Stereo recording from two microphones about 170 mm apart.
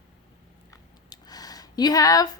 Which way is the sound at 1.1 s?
20° left (ahead or behind).